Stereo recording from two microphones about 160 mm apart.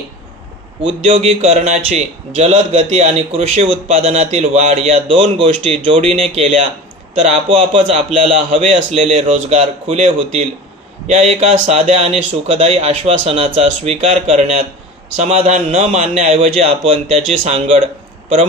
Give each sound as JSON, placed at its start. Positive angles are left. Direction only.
{"t": 1.0, "sound": "speech", "side_deg": -40}